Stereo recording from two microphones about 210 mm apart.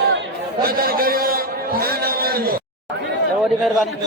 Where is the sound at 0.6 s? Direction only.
45° right (ahead or behind).